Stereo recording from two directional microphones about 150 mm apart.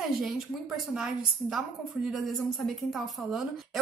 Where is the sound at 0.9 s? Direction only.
5° right (ahead or behind).